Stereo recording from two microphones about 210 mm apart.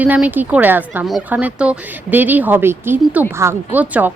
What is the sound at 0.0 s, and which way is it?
Speech, 5° right (ahead or behind).